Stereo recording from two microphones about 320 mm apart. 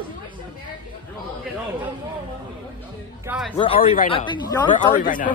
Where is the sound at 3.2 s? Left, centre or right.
Centre.